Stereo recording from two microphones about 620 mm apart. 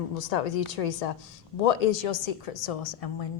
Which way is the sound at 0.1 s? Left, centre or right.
Left.